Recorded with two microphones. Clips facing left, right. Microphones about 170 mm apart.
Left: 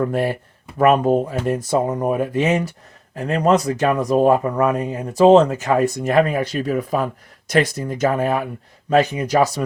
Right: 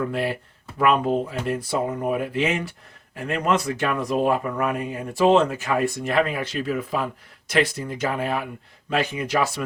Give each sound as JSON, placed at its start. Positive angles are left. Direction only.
{"t": 0.0, "sound": "speech", "side_deg": 45}